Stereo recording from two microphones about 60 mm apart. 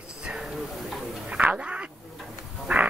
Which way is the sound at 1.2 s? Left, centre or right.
Right.